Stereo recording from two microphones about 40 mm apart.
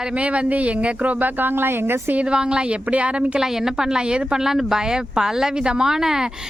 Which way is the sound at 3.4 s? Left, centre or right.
Centre.